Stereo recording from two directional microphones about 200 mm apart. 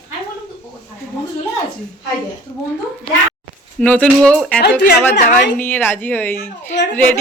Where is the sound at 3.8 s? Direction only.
5° left (ahead or behind).